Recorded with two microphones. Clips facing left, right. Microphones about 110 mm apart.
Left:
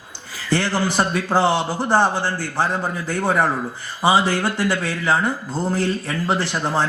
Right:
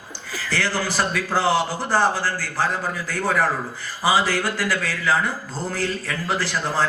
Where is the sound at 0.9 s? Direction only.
25° left (ahead or behind).